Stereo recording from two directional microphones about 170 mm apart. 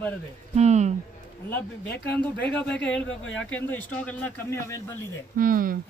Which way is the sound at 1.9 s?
70° left (ahead or behind).